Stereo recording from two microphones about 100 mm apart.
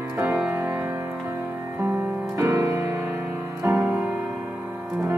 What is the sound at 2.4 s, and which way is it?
Music, 30° right (ahead or behind).